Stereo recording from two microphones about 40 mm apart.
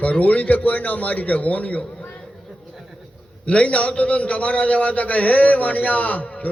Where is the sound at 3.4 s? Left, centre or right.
Left.